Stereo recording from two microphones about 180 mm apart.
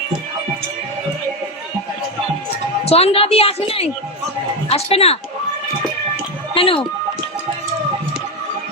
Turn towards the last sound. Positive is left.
turn(degrees=30)  # may be behind; listen again after turning